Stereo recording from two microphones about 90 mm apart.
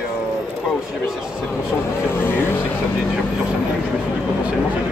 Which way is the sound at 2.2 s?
25° left (ahead or behind).